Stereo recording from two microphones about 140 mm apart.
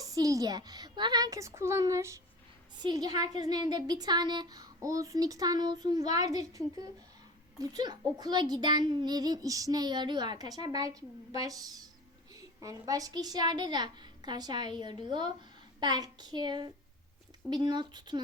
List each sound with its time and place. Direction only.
0.0 s a child's voice: 25° right (ahead or behind)